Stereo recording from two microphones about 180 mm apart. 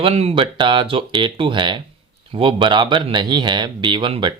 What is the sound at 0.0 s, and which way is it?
Speech, 35° right (ahead or behind).